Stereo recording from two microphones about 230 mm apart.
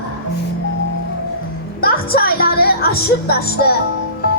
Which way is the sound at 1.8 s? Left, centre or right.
Left.